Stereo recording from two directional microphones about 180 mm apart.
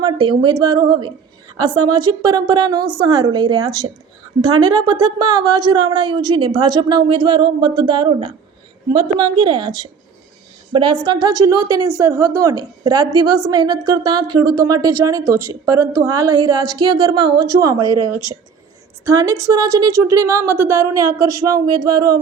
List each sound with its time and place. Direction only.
0.0 s a woman's voice: 25° right (ahead or behind)
4.9 s a woman's voice: 25° right (ahead or behind)